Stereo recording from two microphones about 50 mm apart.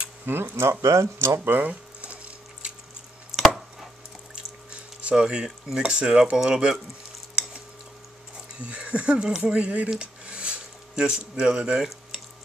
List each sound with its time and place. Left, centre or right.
0.3 s speech: right
0.6 s speech: right
1.4 s speech: right
1.7 s squish: right
3.3 s chopping: centre
4.6 s a sound: centre
5.8 s speech: centre
8.5 s speech: right
9.9 s a sound: right